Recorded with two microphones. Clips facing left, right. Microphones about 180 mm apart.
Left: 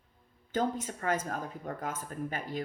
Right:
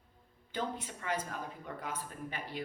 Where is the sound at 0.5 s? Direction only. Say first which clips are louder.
Left 7 dB; 45° left (ahead or behind).